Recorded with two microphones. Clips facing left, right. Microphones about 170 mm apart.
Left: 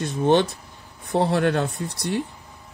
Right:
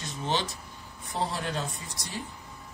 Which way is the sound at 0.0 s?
55° left (ahead or behind).